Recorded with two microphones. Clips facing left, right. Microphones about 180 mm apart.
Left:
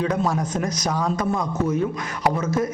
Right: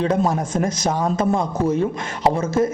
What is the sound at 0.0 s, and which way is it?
A man's voice, 30° right (ahead or behind).